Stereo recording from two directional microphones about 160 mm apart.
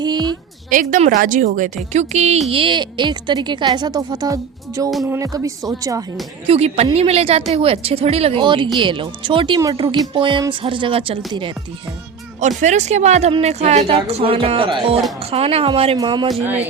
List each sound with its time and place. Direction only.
0.0 s a sound: 25° right (ahead or behind)
0.7 s a woman's voice: 55° right (ahead or behind)
2.5 s a woman's voice: 35° right (ahead or behind)
6.5 s speech: 40° right (ahead or behind)
12.4 s a woman's voice: 50° right (ahead or behind)
16.0 s a woman's voice: 25° right (ahead or behind)